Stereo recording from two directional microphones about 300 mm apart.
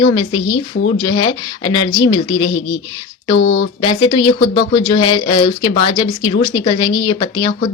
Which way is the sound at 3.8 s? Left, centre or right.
Centre.